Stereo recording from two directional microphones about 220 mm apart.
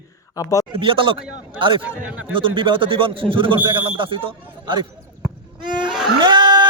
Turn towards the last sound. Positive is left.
turn(degrees=-20)  # may be behind; listen again after turning